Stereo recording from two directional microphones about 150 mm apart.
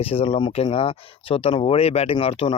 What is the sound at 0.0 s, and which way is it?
Speech, 40° left (ahead or behind).